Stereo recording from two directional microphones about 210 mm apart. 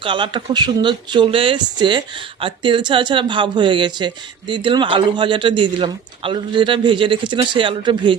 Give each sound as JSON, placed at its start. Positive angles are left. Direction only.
{"t": 0.0, "sound": "speech", "side_deg": -25}